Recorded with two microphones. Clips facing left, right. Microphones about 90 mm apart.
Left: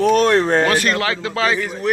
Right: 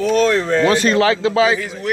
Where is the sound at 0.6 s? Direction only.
25° right (ahead or behind).